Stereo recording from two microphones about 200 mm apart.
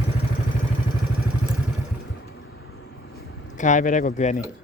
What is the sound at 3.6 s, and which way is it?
Speech, 40° left (ahead or behind).